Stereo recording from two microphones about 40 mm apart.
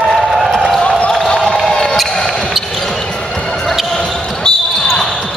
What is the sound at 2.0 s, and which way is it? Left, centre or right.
Basketball bounce, centre.